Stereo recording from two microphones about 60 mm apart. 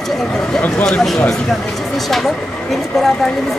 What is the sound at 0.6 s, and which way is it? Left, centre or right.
Speech, left.